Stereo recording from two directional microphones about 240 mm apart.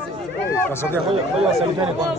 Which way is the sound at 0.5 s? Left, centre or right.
Centre.